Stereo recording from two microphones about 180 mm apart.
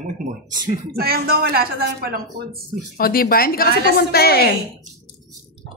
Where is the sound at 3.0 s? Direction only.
55° left (ahead or behind).